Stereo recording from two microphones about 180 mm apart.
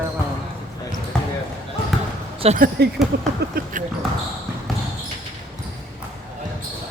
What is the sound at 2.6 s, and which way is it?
Speech, 65° right (ahead or behind).